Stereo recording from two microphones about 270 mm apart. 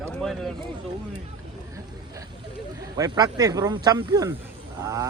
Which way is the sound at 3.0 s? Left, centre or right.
Centre.